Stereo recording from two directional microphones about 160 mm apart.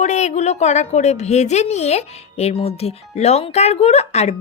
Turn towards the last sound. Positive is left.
turn(degrees=40)  # may be behind; listen again after turning